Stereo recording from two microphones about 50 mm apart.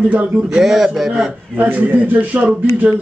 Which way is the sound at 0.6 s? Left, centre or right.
Centre.